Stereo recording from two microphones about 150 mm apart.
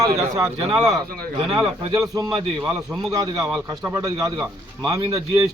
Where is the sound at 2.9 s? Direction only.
Centre (ahead or behind).